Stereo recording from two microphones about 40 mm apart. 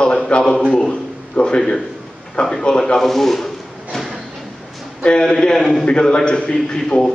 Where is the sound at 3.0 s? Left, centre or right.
Centre.